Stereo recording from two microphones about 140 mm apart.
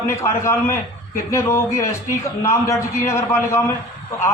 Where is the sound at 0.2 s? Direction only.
20° left (ahead or behind).